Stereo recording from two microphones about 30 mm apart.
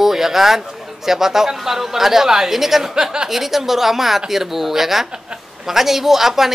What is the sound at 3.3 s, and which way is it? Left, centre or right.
A man's voice, centre.